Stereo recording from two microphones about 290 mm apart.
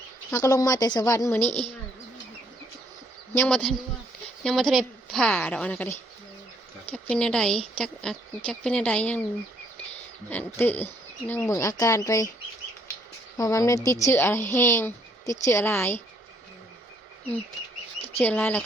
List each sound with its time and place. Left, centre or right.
0.3 s speech: centre
3.3 s a woman's voice: centre
10.2 s speech: centre
13.3 s speech: centre
18.2 s a woman's voice: centre